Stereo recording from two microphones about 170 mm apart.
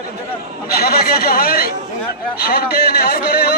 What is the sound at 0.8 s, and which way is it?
Speech, 65° left (ahead or behind).